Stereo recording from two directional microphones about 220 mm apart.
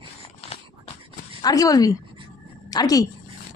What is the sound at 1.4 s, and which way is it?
Speech, 15° left (ahead or behind).